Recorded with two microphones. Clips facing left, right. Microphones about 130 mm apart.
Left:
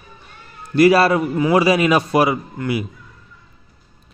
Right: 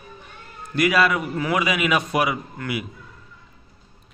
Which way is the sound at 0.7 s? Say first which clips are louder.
Left 7 dB; 35° left (ahead or behind).